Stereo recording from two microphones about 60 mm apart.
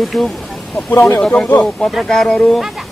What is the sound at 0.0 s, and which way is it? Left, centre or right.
Speech, centre.